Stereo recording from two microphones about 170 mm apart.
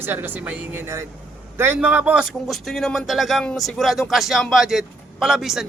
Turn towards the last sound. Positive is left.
turn(degrees=0)  # may be behind; listen again after turning